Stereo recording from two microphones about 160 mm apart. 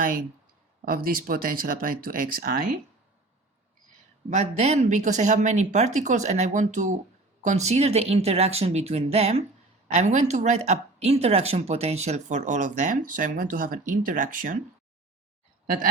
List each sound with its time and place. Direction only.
0.0 s speech: 60° right (ahead or behind)
4.3 s speech: 45° right (ahead or behind)